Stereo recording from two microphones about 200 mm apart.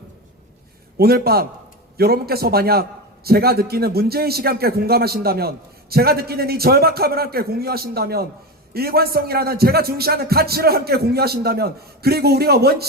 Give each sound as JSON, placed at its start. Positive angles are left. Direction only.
{"t": 0.9, "sound": "a man's voice", "side_deg": -50}